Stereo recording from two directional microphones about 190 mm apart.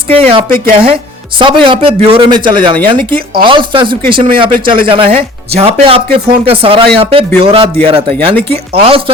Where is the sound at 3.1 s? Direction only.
50° right (ahead or behind).